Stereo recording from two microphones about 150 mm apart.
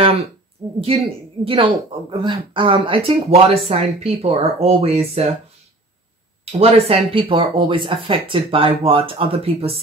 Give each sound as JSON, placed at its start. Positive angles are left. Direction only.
{"t": 0.7, "sound": "speech", "side_deg": -40}
{"t": 6.4, "sound": "speech", "side_deg": -40}